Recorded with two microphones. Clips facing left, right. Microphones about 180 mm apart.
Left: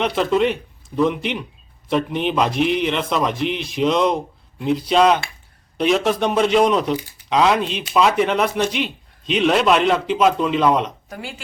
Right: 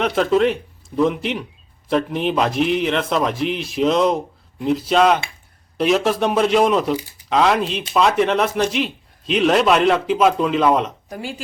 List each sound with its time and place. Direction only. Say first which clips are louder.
0.0 s a man's voice: right 1 dB; centre (ahead or behind)
11.1 s speech: right 3 dB; 35° right (ahead or behind)